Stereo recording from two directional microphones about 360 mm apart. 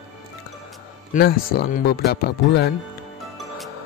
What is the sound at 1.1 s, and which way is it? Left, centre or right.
Speech, left.